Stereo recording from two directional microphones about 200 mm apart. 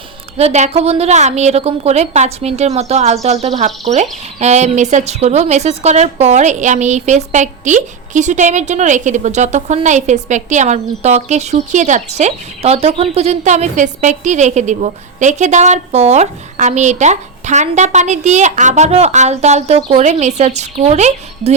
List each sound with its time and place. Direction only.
0.3 s speech: 35° right (ahead or behind)